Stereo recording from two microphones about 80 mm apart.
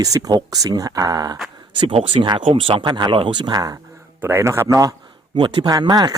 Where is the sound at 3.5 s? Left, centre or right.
Right.